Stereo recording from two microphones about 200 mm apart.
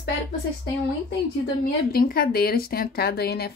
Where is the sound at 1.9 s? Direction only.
50° left (ahead or behind).